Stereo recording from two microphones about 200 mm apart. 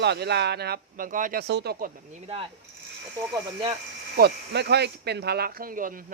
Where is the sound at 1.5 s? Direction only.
55° right (ahead or behind).